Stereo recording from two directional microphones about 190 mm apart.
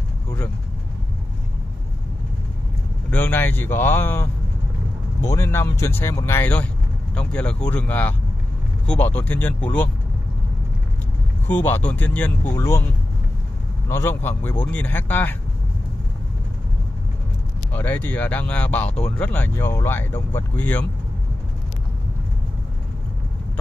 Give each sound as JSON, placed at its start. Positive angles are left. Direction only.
{"t": 3.1, "sound": "speech", "side_deg": 10}
{"t": 11.4, "sound": "speech", "side_deg": 10}
{"t": 13.8, "sound": "speech", "side_deg": 15}
{"t": 17.7, "sound": "speech", "side_deg": 10}